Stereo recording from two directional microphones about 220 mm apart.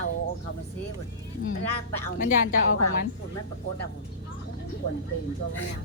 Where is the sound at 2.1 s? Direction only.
40° left (ahead or behind).